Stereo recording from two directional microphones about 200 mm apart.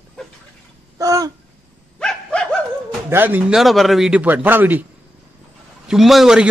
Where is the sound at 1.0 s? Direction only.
15° right (ahead or behind).